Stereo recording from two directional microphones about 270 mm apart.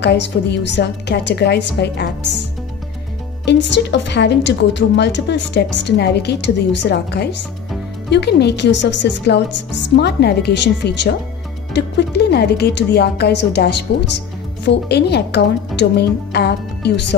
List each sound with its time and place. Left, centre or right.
0.0 s a woman's voice: left
3.4 s a woman's voice: left